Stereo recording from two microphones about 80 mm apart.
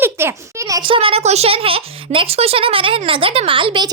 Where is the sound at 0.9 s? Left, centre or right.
Right.